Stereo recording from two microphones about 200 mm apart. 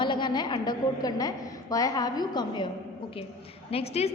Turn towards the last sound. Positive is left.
turn(degrees=30)  # may be behind; listen again after turning